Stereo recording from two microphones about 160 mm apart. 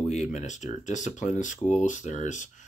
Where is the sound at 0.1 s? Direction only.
45° left (ahead or behind).